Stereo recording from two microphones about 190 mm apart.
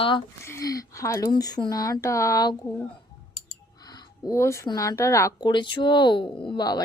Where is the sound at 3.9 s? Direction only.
20° left (ahead or behind).